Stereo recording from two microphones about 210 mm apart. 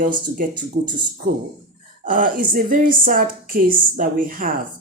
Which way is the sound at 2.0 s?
40° right (ahead or behind).